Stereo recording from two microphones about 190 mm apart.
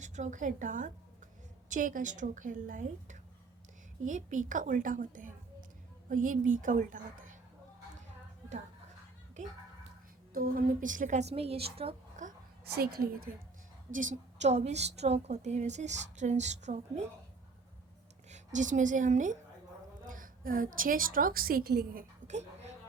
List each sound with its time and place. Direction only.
0.0 s a woman's voice: 40° right (ahead or behind)
10.3 s a woman's voice: 50° right (ahead or behind)
12.7 s a woman's voice: 55° right (ahead or behind)
13.9 s a woman's voice: 40° right (ahead or behind)
18.3 s a woman's voice: 40° right (ahead or behind); by 22.0 s 55° right (ahead or behind)
22.3 s a sound: 35° right (ahead or behind)